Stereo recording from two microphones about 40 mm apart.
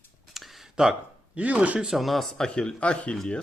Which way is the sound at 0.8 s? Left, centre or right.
Centre.